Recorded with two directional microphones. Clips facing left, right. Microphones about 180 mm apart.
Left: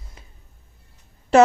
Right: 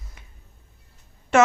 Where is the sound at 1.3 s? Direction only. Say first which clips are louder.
Left 4 dB; 35° left (ahead or behind).